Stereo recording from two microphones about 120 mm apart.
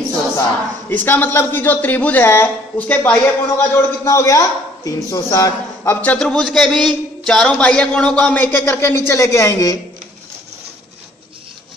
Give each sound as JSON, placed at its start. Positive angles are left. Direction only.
{"t": 0.4, "sound": "a man's voice", "side_deg": 15}
{"t": 5.9, "sound": "a man's voice", "side_deg": 10}